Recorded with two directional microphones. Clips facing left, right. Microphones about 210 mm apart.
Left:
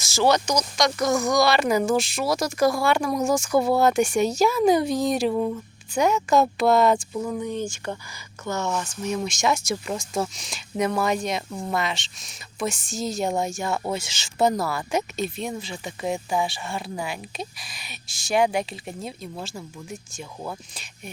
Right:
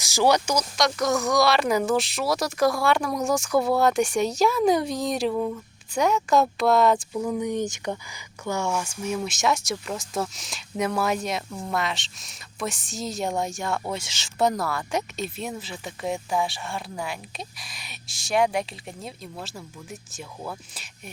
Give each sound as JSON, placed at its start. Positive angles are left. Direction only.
{"t": 0.0, "sound": "speech", "side_deg": -15}
{"t": 5.3, "sound": "a sound", "side_deg": 10}
{"t": 5.9, "sound": "speech", "side_deg": 0}
{"t": 7.3, "sound": "speech", "side_deg": -15}